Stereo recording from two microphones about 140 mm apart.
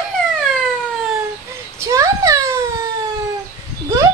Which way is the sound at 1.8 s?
20° right (ahead or behind).